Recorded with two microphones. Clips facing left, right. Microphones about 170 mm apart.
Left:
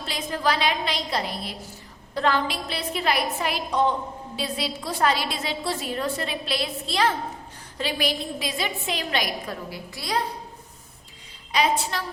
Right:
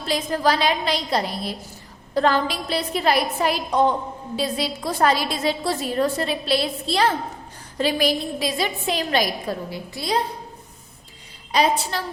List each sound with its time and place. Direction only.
0.0 s a woman's voice: 40° right (ahead or behind); by 10.2 s 25° right (ahead or behind)
11.5 s a woman's voice: 35° right (ahead or behind)